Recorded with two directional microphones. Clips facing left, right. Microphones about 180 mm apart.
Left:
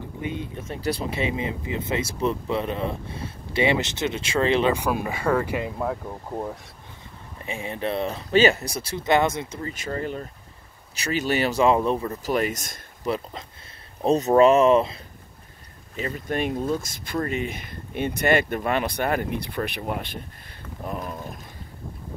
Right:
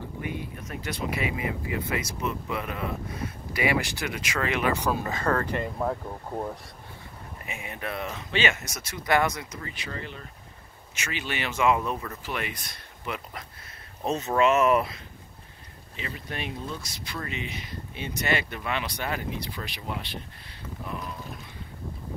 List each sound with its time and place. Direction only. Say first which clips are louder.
0.2 s speech: left 5 dB; 25° left (ahead or behind)
0.7 s speech: left 4 dB; 35° left (ahead or behind)
4.7 s speech: left 2 dB; 10° left (ahead or behind)
7.4 s speech: left 8 dB; 30° left (ahead or behind)
9.8 s speech: left 12 dB; 45° left (ahead or behind); by 15.0 s 25° left (ahead or behind)
16.0 s speech: left 9 dB; 45° left (ahead or behind)